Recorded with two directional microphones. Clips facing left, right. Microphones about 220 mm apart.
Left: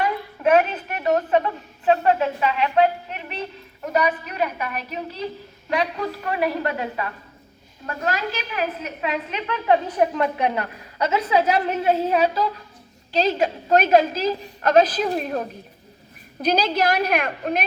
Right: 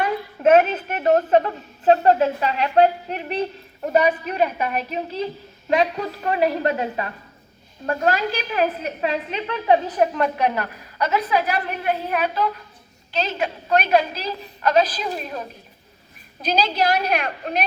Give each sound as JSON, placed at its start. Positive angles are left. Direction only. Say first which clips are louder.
{"t": 0.7, "sound": "a woman's voice", "louder": "right 3 dB", "side_deg": -30}
{"t": 10.2, "sound": "a woman's voice", "louder": "right 1 dB", "side_deg": 20}